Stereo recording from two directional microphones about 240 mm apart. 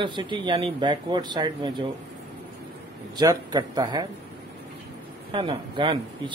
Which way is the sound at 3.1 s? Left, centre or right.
Centre.